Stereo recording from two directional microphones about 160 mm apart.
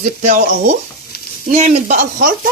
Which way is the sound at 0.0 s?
55° right (ahead or behind).